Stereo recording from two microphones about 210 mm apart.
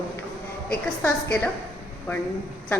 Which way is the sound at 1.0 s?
10° left (ahead or behind).